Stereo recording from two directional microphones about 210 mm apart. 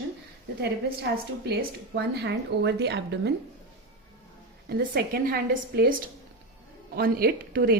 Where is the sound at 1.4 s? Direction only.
50° right (ahead or behind).